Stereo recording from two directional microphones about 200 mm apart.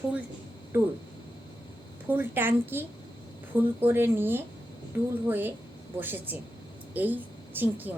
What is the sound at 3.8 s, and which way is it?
A woman's voice, 10° right (ahead or behind).